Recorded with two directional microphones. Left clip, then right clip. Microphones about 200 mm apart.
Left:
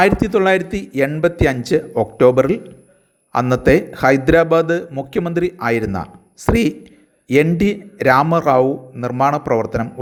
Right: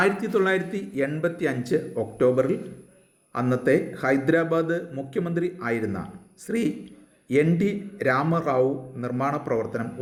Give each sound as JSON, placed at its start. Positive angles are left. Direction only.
{"t": 0.0, "sound": "a man's voice", "side_deg": 40}